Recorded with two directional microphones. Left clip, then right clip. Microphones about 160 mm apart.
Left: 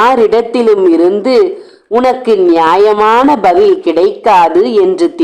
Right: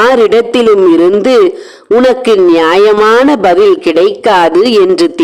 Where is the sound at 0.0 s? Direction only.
40° right (ahead or behind).